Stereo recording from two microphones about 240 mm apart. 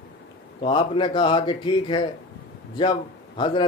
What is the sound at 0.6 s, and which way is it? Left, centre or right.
A man's voice, left.